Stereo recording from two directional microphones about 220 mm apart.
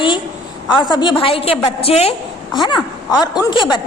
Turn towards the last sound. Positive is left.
turn(degrees=20)  # may be behind; listen again after turning